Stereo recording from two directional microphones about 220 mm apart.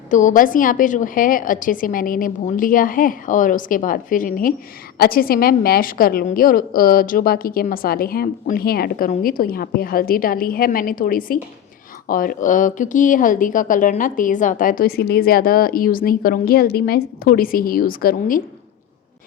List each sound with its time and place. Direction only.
0.1 s a woman's voice: 35° left (ahead or behind)